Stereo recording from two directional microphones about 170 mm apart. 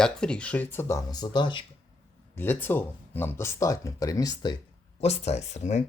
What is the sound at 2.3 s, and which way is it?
Speech, 10° left (ahead or behind).